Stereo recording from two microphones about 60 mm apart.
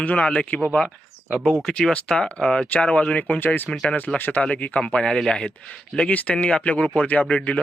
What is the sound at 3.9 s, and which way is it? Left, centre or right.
Speech, left.